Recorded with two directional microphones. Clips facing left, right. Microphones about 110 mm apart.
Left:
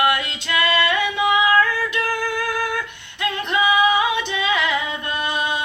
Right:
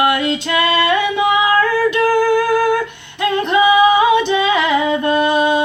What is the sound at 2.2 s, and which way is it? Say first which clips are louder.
Female singing: right 10 dB; 35° right (ahead or behind).